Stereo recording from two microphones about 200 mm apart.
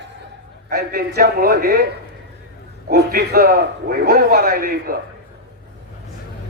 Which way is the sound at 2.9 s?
50° right (ahead or behind).